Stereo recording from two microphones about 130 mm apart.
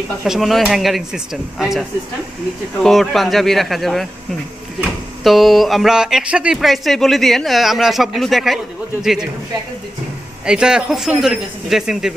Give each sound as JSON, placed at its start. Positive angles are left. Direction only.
{"t": 0.2, "sound": "speech", "side_deg": 0}
{"t": 10.4, "sound": "speech", "side_deg": -5}